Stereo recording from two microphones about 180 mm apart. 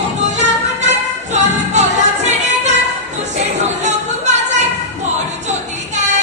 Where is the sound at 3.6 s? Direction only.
40° right (ahead or behind).